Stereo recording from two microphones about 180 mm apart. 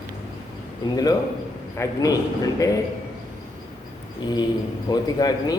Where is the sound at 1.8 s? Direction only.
20° left (ahead or behind).